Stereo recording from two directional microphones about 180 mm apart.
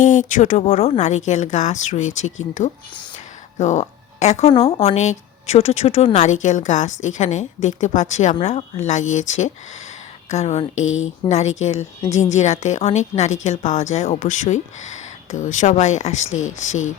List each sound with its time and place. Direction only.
0.0 s a woman's voice: 45° left (ahead or behind)
10.8 s speech: 90° left
11.3 s speech: 35° left (ahead or behind)
16.2 s speech: 90° left
16.6 s speech: 40° left (ahead or behind)